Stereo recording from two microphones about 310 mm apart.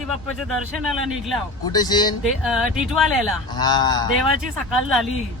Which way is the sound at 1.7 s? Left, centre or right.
Centre.